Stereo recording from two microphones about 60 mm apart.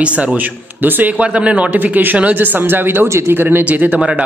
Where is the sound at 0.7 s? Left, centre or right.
Right.